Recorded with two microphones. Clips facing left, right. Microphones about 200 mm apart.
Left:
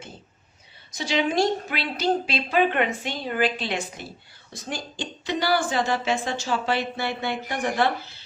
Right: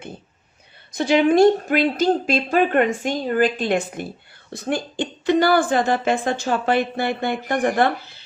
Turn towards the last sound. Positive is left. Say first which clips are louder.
# right 6 dB
turn(degrees=-55)  # may be behind; listen again after turning